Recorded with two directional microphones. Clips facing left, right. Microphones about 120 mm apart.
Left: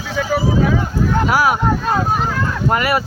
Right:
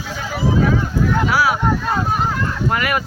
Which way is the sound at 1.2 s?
45° left (ahead or behind).